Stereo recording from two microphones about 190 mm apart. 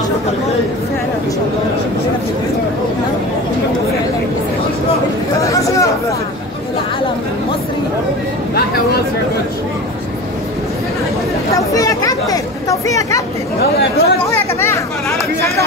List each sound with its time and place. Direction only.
5.4 s speech: 15° left (ahead or behind)
11.5 s speech: 15° left (ahead or behind)
13.6 s speech: 55° left (ahead or behind)
14.2 s speech: 15° left (ahead or behind)